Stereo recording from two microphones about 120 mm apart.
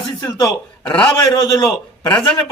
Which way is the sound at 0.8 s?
15° left (ahead or behind).